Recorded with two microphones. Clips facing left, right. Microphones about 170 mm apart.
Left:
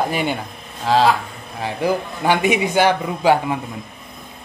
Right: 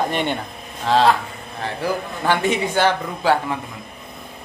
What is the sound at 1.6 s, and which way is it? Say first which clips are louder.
Speech: left 3 dB; 15° left (ahead or behind).